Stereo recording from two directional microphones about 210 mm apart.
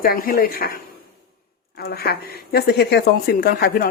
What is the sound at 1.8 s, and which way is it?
Speech, 50° left (ahead or behind).